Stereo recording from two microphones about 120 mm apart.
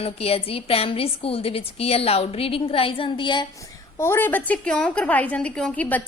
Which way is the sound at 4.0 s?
20° left (ahead or behind).